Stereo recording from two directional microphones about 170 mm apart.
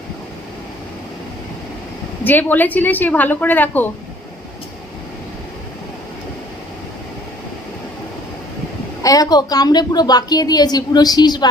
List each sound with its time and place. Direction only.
2.2 s a woman's voice: 10° left (ahead or behind)
9.0 s a woman's voice: 20° left (ahead or behind)